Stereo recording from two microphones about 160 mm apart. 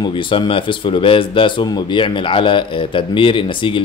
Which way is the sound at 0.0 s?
30° left (ahead or behind).